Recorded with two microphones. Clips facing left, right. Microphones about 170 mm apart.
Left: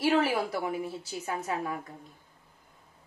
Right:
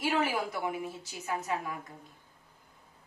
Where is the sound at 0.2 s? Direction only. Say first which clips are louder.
Left 3 dB; 35° left (ahead or behind).